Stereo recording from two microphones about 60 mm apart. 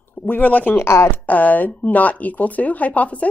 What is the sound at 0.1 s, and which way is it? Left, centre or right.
Speech, left.